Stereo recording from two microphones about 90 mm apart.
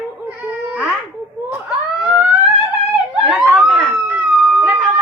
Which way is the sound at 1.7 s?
15° right (ahead or behind).